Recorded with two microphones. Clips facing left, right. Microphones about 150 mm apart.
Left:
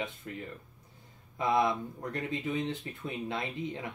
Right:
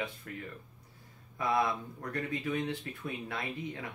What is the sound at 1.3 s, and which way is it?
Speech, 20° left (ahead or behind).